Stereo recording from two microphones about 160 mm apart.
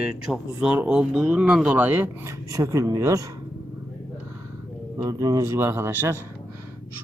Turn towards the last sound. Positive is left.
turn(degrees=-15)  # may be behind; listen again after turning